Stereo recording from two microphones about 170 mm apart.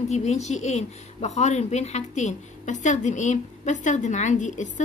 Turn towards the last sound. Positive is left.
turn(degrees=45)  # may be behind; listen again after turning